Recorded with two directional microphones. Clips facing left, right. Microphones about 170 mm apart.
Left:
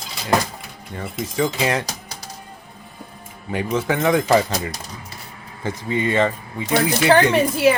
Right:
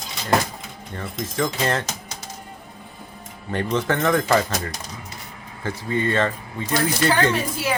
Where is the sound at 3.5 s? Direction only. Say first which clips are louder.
Left 1 dB; 10° left (ahead or behind).